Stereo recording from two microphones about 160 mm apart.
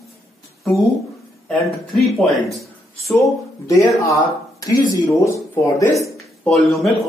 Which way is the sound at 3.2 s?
20° left (ahead or behind).